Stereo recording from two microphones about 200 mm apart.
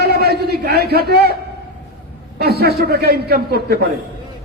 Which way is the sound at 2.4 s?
50° right (ahead or behind).